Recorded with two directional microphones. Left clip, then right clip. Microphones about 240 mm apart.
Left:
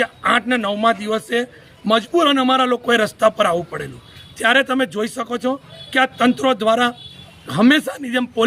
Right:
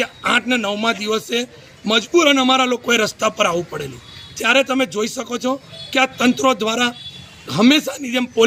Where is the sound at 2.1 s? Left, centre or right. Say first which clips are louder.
Right 3 dB; centre.